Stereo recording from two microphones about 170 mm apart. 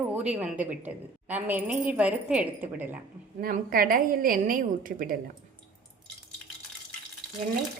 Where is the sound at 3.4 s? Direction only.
55° right (ahead or behind).